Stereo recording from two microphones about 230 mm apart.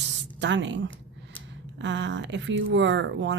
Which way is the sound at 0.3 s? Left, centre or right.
Right.